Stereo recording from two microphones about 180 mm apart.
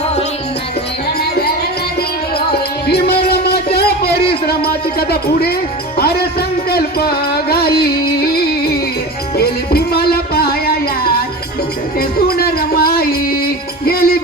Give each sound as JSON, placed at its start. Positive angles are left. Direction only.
{"t": 2.5, "sound": "music", "side_deg": 60}